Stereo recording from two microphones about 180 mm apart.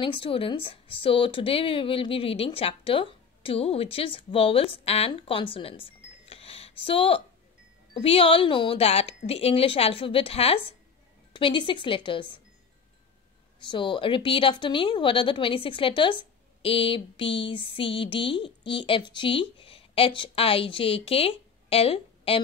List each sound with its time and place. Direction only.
0.0 s a woman's voice: 30° left (ahead or behind)
13.7 s a woman's voice: 25° left (ahead or behind)